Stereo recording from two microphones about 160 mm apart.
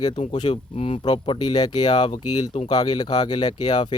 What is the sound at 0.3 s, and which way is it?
Speech, 35° left (ahead or behind).